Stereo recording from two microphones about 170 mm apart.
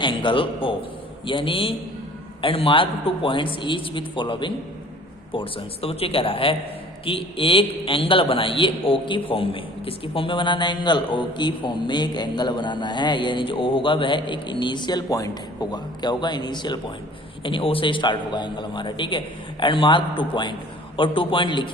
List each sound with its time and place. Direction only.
0.0 s a man's voice: 30° left (ahead or behind)